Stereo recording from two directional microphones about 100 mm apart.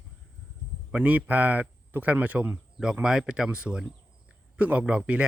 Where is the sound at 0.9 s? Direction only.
15° right (ahead or behind).